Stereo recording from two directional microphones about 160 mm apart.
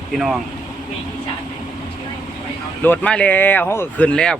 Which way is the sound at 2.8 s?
10° left (ahead or behind).